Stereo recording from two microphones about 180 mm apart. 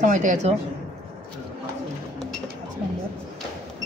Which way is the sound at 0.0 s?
45° right (ahead or behind).